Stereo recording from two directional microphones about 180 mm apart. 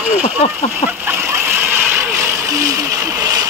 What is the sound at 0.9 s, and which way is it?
Vehicle, 10° right (ahead or behind).